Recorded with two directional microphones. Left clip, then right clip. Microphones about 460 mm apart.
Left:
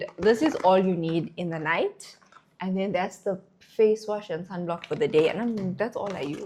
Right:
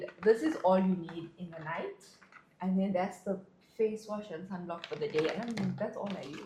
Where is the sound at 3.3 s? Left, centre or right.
Left.